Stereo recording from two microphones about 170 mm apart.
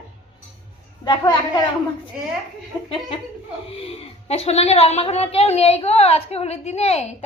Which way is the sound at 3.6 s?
35° left (ahead or behind).